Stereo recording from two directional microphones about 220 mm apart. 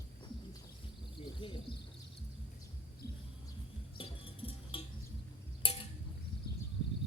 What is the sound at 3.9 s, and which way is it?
Music, 25° left (ahead or behind).